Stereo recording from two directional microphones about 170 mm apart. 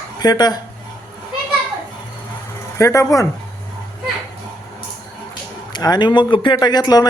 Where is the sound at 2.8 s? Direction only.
20° left (ahead or behind).